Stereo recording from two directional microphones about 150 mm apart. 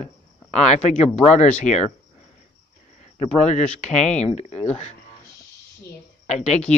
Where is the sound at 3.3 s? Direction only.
50° left (ahead or behind).